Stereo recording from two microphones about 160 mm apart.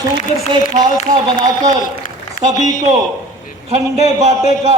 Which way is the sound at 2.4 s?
55° left (ahead or behind).